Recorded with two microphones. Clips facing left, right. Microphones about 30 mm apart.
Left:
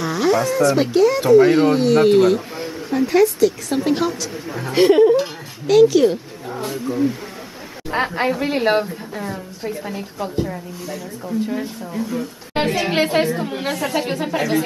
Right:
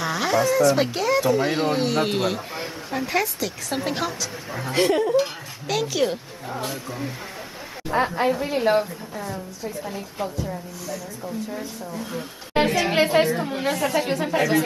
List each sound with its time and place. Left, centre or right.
0.0 s a man's voice: centre
4.6 s a woman's voice: centre
5.2 s speech: centre
7.9 s a woman's voice: left
12.5 s a woman's voice: centre